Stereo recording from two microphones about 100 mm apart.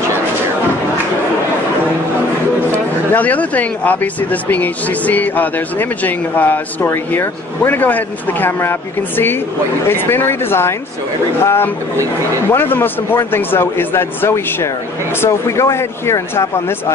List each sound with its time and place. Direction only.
2.7 s speech: 15° left (ahead or behind)